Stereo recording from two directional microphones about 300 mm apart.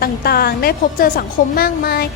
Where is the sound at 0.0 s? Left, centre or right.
Left.